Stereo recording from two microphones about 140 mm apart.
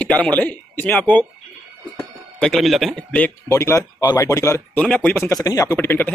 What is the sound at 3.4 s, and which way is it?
Speech, 20° left (ahead or behind).